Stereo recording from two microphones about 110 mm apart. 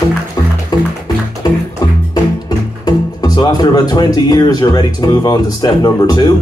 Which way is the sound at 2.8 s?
40° left (ahead or behind).